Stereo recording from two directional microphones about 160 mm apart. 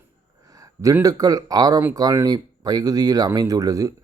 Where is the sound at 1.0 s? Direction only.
20° right (ahead or behind).